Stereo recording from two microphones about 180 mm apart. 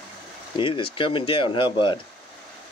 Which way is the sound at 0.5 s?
30° left (ahead or behind).